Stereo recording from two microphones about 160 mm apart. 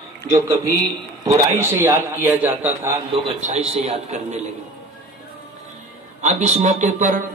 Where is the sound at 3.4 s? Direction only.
45° right (ahead or behind).